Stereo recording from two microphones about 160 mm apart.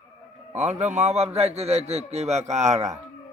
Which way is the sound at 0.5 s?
45° right (ahead or behind).